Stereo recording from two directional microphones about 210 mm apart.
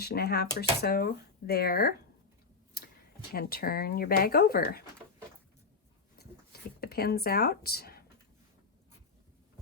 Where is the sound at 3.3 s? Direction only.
45° left (ahead or behind).